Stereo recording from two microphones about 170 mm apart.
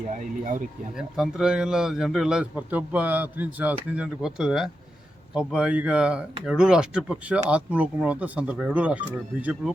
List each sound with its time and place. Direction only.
0.1 s speech: 50° right (ahead or behind)
0.9 s a man's voice: 5° right (ahead or behind)